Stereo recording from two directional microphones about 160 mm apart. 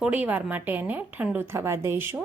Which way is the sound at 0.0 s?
10° right (ahead or behind).